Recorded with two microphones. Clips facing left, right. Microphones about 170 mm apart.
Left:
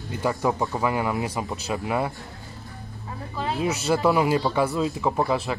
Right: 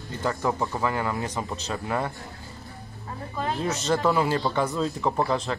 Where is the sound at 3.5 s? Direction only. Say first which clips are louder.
Left 2 dB; 15° left (ahead or behind).